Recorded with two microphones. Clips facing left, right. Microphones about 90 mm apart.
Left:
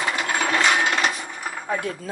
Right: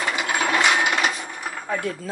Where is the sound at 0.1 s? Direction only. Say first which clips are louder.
Right 2 dB; 5° right (ahead or behind).